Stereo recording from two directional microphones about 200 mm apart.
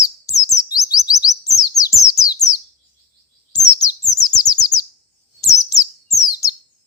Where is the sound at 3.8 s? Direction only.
20° left (ahead or behind).